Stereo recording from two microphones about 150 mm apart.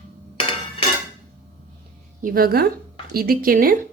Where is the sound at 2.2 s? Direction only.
75° right (ahead or behind).